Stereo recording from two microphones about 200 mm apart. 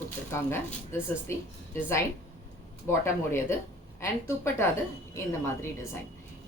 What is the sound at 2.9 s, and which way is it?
A woman's voice, 15° left (ahead or behind).